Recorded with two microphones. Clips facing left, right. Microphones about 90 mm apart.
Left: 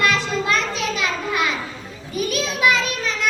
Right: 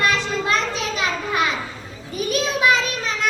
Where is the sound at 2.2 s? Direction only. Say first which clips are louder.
Right 1 dB; 30° right (ahead or behind).